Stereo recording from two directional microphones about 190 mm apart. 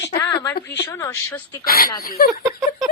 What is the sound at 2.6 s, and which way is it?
Speech, 20° right (ahead or behind).